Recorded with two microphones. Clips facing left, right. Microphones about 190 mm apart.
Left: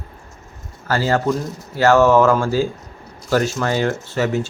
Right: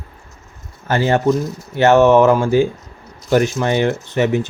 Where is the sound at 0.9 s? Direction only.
20° right (ahead or behind).